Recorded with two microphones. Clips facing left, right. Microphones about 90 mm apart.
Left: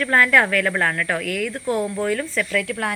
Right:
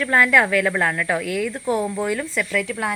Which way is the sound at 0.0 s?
10° right (ahead or behind).